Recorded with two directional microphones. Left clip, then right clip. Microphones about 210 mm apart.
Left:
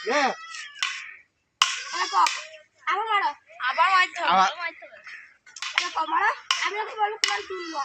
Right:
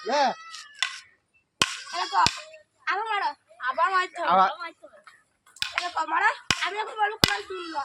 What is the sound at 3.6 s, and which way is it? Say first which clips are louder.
Speech: left 4 dB; 40° right (ahead or behind).